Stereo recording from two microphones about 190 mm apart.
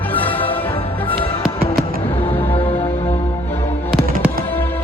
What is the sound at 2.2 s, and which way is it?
Music, 30° left (ahead or behind).